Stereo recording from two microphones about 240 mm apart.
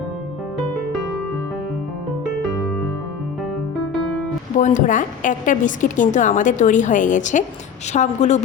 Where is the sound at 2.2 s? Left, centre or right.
Centre.